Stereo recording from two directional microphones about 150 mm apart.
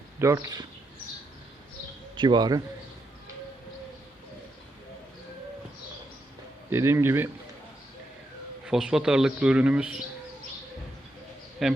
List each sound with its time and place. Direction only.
0.2 s speech: 20° right (ahead or behind)
2.1 s speech: 30° right (ahead or behind)
6.7 s speech: 15° right (ahead or behind)
8.6 s a man's voice: 5° right (ahead or behind)
11.6 s a man's voice: centre (ahead or behind)